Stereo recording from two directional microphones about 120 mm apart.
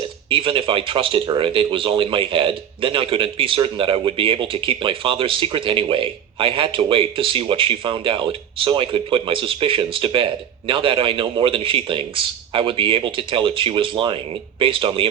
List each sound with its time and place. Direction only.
0.3 s speech: 45° right (ahead or behind)